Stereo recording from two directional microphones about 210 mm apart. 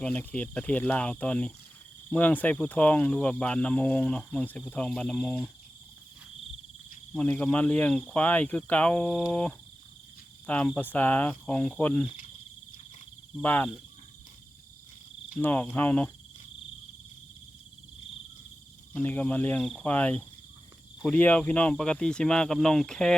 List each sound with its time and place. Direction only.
0.0 s speech: 5° left (ahead or behind)
7.1 s speech: 5° left (ahead or behind)
12.0 s speech: 40° left (ahead or behind)
13.4 s speech: 10° left (ahead or behind)
15.4 s speech: 10° left (ahead or behind)
18.9 s speech: 5° left (ahead or behind)